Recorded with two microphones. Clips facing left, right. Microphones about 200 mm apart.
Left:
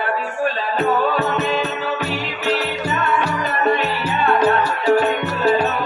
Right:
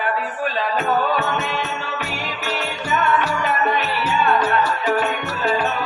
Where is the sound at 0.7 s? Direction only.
35° left (ahead or behind).